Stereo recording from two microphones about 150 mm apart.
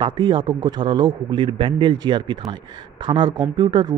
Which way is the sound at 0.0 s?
30° right (ahead or behind).